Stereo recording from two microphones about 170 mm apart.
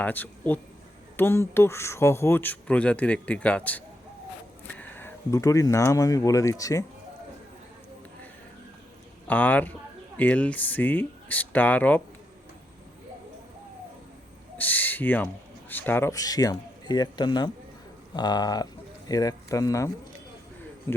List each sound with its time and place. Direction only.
0.0 s speech: 10° left (ahead or behind)
9.2 s speech: 10° left (ahead or behind)
14.6 s owl: 10° left (ahead or behind)
15.7 s speech: 10° left (ahead or behind)